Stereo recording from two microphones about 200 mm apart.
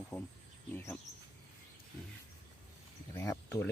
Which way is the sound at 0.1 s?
15° left (ahead or behind).